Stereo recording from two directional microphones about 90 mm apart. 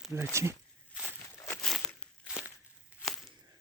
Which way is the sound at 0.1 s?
30° right (ahead or behind).